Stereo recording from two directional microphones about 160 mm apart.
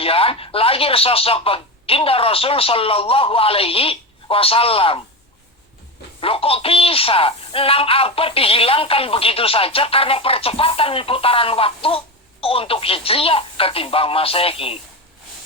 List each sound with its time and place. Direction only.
0.0 s a man's voice: 35° left (ahead or behind)
6.1 s a man's voice: 35° left (ahead or behind)